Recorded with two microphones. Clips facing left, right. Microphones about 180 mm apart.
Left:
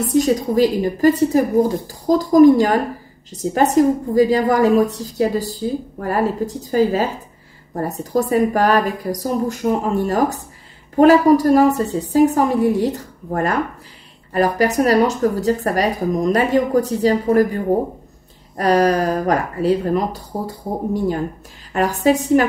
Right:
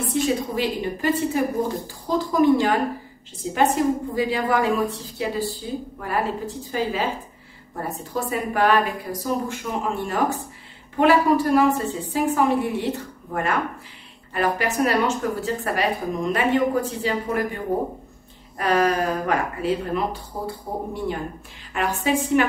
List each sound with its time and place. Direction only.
0.1 s a woman's voice: 40° left (ahead or behind)
18.6 s a woman's voice: 40° left (ahead or behind)